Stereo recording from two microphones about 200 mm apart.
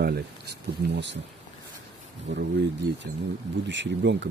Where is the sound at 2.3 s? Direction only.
65° right (ahead or behind).